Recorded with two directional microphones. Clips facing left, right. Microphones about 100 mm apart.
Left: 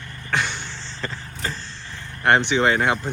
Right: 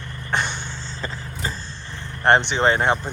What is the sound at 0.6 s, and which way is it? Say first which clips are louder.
Vehicle: right 1 dB; 10° right (ahead or behind).